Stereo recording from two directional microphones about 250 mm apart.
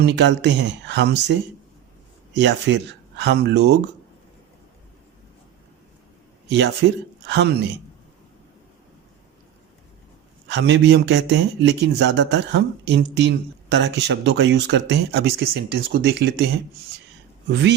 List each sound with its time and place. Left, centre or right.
0.0 s a man's voice: right
6.5 s a man's voice: right
10.5 s a man's voice: right
17.5 s a man's voice: right